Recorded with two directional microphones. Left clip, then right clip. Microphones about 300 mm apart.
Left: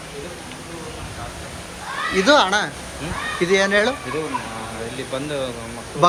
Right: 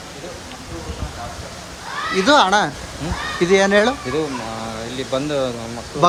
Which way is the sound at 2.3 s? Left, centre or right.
Centre.